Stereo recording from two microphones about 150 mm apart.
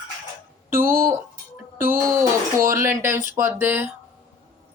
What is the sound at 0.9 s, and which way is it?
Music, 75° right (ahead or behind).